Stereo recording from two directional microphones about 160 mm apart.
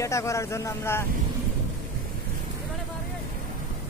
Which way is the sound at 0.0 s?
20° left (ahead or behind).